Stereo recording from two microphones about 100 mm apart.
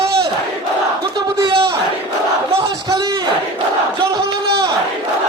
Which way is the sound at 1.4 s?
70° right (ahead or behind).